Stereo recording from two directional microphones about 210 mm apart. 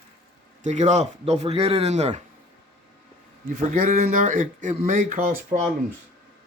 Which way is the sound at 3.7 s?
40° right (ahead or behind).